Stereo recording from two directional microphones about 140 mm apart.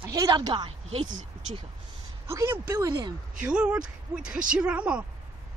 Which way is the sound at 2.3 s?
15° right (ahead or behind).